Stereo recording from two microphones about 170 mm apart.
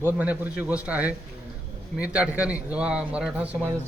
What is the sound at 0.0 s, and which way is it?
A man's voice, 10° right (ahead or behind).